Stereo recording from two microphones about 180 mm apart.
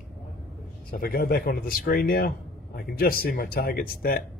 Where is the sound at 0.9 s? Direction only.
55° left (ahead or behind).